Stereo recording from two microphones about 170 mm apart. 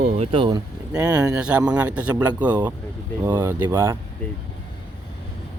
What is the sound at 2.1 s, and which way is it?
Speech, 20° right (ahead or behind).